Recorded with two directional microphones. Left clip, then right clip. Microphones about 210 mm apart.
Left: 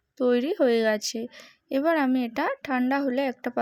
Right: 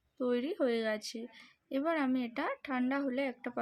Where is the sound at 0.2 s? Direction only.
35° left (ahead or behind).